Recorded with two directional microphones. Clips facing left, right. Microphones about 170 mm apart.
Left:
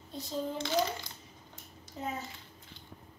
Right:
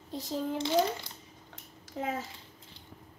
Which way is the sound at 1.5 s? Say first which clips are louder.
Right 6 dB; 90° right.